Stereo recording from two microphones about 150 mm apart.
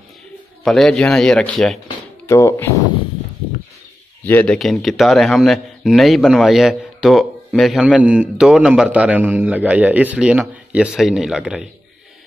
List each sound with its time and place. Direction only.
0.7 s speech: 5° left (ahead or behind)
2.2 s speech: 20° left (ahead or behind)
4.3 s speech: 10° left (ahead or behind)
4.6 s speech: centre (ahead or behind)